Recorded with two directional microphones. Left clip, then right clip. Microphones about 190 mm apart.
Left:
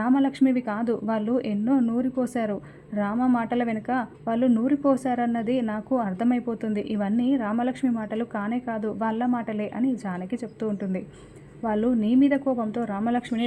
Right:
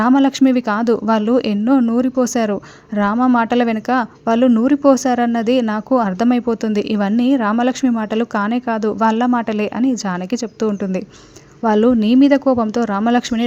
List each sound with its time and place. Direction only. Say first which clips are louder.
0.0 s speech: right 9 dB; 25° right (ahead or behind)